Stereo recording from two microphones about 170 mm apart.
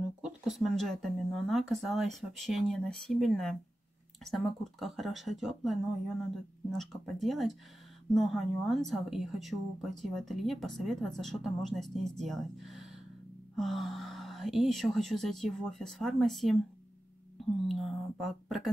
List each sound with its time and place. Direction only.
0.2 s speech: centre (ahead or behind)
17.6 s speech: centre (ahead or behind)